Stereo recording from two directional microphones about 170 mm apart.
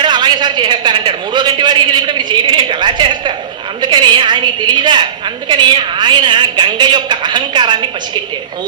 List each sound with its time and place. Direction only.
0.0 s a woman's voice: 25° right (ahead or behind)